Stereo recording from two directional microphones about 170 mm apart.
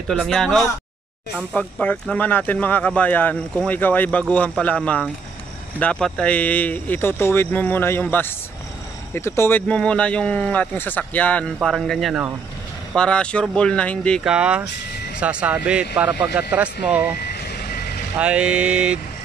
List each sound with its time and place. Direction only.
0.1 s speech: centre (ahead or behind)
17.2 s reversing beeps: 65° left (ahead or behind)
18.2 s speech: 5° right (ahead or behind)